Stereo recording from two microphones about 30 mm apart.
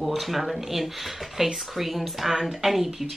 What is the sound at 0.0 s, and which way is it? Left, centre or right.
Speech, centre.